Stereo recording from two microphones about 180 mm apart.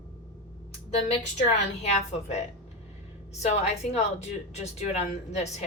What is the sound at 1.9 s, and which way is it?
Speech, 35° left (ahead or behind).